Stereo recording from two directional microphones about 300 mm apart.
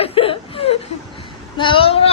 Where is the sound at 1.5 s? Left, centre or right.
Centre.